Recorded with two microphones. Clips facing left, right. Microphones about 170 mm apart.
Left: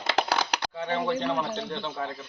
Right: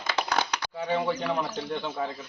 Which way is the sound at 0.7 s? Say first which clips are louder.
Right 1 dB; 5° right (ahead or behind).